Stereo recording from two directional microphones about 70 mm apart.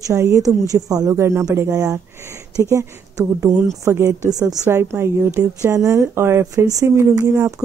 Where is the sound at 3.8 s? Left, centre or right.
Right.